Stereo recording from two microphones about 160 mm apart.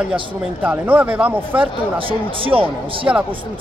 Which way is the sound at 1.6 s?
35° right (ahead or behind).